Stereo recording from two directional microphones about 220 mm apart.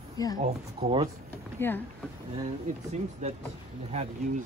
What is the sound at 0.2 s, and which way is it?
Speech, 15° left (ahead or behind).